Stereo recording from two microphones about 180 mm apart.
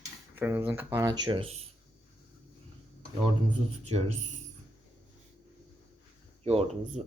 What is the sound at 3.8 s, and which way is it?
Speech, 35° right (ahead or behind).